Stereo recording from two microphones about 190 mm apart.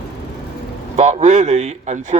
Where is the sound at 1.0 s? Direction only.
35° right (ahead or behind).